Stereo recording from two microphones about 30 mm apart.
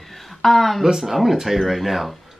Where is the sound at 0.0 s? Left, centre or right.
Centre.